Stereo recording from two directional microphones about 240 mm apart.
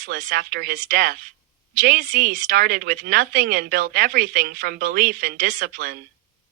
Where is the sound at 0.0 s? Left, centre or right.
Right.